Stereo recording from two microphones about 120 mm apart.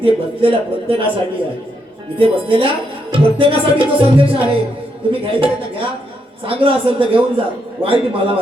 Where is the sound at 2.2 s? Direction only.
50° right (ahead or behind).